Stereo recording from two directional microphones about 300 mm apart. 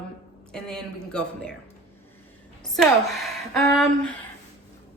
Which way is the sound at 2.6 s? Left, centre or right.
Centre.